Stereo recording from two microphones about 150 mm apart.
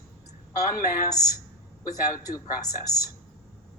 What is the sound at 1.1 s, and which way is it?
A woman's voice, 25° left (ahead or behind).